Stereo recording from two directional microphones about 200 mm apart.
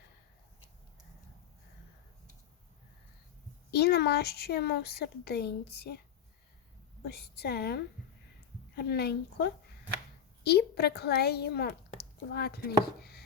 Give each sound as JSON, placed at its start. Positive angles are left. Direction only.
{"t": 3.7, "sound": "a woman's voice", "side_deg": 55}
{"t": 7.0, "sound": "a woman's voice", "side_deg": 55}